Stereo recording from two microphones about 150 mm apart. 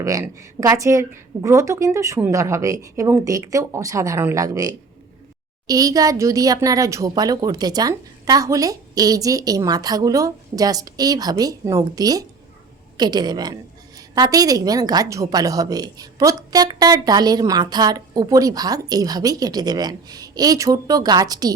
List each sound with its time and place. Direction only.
0.0 s a woman's voice: 20° right (ahead or behind)